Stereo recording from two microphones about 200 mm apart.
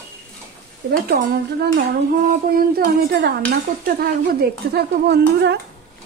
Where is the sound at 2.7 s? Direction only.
50° right (ahead or behind).